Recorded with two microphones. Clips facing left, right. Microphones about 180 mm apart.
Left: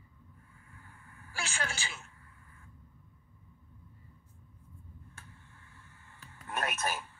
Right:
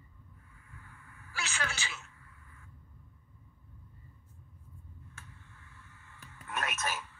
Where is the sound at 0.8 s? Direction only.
40° left (ahead or behind).